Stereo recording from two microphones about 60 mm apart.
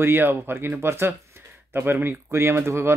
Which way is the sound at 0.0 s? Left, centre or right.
Right.